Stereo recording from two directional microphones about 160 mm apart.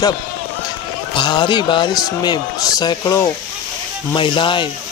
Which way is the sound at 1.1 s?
30° left (ahead or behind).